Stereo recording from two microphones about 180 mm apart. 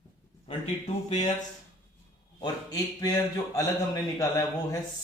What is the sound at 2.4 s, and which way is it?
Speech, 20° left (ahead or behind).